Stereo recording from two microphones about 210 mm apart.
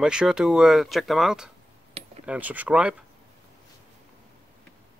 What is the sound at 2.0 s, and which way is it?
Cutlery, 30° right (ahead or behind).